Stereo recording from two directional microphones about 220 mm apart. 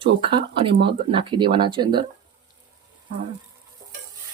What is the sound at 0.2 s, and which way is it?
Speech, 25° right (ahead or behind).